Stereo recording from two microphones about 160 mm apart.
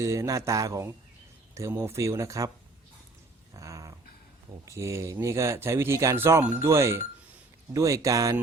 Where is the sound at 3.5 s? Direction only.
20° right (ahead or behind).